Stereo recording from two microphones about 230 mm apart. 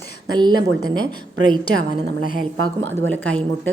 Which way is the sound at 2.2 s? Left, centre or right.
Left.